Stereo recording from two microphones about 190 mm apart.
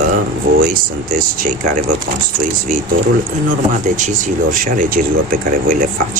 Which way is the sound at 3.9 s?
40° right (ahead or behind).